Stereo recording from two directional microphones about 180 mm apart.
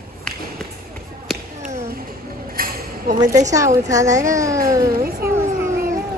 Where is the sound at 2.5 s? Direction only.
50° right (ahead or behind).